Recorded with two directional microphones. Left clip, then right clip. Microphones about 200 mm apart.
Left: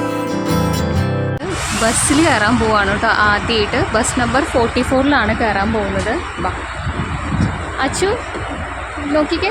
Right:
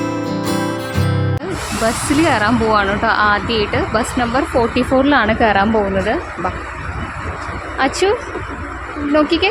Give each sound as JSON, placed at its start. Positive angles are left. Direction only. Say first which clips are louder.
{"t": 1.8, "sound": "speech", "louder": "left 1 dB", "side_deg": -10}
{"t": 7.8, "sound": "speech", "louder": "right 2 dB", "side_deg": -25}
{"t": 9.1, "sound": "speech", "louder": "right 2 dB", "side_deg": -30}